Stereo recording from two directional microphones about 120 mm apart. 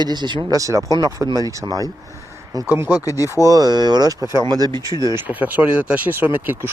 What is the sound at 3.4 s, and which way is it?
Speech, 30° right (ahead or behind).